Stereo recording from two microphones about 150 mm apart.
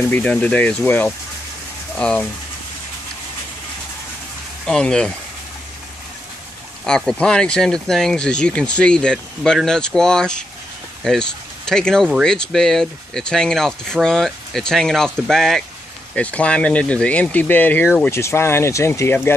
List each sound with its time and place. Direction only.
0.1 s speech: 5° left (ahead or behind)
4.6 s speech: 5° left (ahead or behind)
6.9 s speech: 5° left (ahead or behind)